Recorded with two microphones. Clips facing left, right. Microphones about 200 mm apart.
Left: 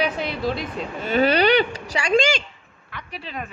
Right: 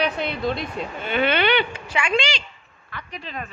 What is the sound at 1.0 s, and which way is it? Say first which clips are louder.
Speech: left 4 dB; 40° left (ahead or behind).